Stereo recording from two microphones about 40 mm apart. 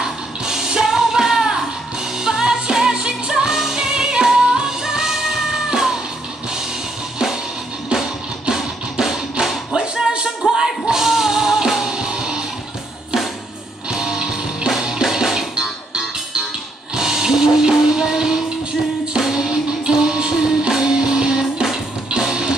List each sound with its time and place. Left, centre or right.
0.0 s music: centre
7.9 s music: centre
13.8 s music: centre
16.9 s music: centre